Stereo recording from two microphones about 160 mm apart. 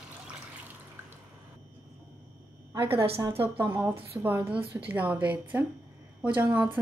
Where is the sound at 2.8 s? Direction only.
15° right (ahead or behind).